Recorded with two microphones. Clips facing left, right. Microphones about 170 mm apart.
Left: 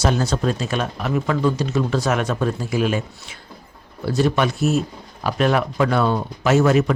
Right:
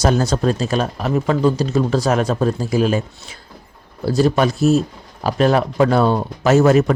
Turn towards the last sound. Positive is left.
turn(degrees=-40)  # may be behind; listen again after turning